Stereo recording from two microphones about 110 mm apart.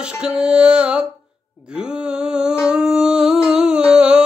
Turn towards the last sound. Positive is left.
turn(degrees=-10)  # may be behind; listen again after turning